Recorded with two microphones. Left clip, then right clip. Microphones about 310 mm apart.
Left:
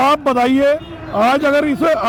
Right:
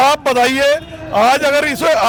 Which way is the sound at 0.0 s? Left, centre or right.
Right.